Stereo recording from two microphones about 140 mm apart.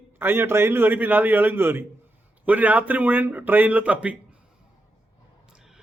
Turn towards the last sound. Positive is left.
turn(degrees=-10)  # may be behind; listen again after turning